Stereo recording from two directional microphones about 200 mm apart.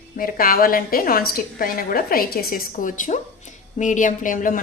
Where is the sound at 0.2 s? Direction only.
45° left (ahead or behind).